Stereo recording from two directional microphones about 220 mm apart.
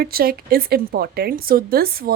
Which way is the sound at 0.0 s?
45° right (ahead or behind).